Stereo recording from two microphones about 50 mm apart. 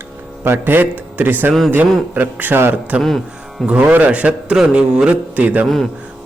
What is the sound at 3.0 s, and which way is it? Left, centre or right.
Speech, centre.